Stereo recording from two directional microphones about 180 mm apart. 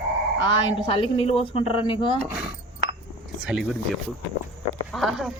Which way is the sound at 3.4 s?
5° right (ahead or behind).